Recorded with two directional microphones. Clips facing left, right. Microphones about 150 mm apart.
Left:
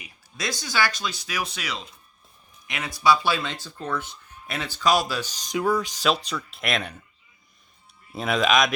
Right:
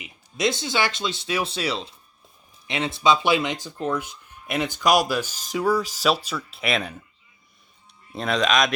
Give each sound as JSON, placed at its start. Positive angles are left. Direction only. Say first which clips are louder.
{"t": 0.0, "sound": "speech", "louder": "right 8 dB", "side_deg": -20}
{"t": 8.1, "sound": "speech", "louder": "even", "side_deg": 5}